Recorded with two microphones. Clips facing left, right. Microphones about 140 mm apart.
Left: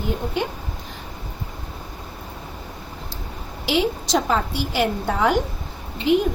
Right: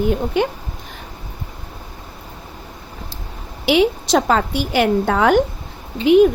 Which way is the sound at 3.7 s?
65° right (ahead or behind).